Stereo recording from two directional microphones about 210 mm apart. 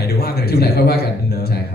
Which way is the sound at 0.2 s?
45° left (ahead or behind).